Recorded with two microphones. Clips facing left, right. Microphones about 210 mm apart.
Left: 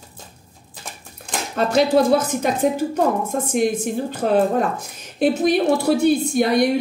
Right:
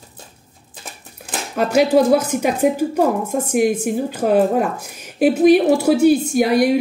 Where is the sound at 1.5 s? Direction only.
10° right (ahead or behind).